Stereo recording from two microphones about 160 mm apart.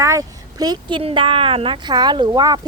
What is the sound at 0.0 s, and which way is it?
Speech, 20° right (ahead or behind).